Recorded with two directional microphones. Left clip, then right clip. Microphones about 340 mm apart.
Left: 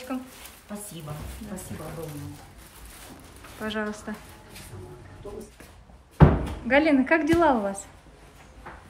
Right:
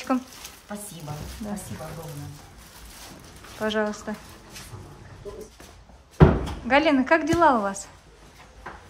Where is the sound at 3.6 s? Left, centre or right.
Centre.